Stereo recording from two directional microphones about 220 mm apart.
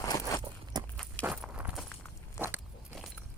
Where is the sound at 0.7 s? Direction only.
15° right (ahead or behind).